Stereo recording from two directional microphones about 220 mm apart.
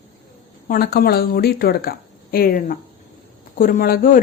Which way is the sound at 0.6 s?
45° left (ahead or behind).